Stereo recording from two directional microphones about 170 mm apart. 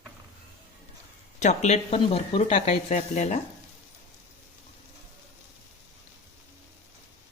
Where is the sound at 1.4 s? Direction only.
40° left (ahead or behind).